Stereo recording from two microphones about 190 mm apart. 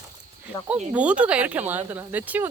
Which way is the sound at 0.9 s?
5° right (ahead or behind).